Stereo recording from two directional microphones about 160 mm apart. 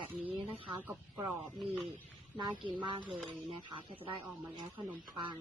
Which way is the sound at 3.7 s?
30° right (ahead or behind).